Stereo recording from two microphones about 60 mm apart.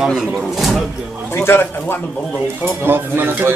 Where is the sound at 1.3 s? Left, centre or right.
Left.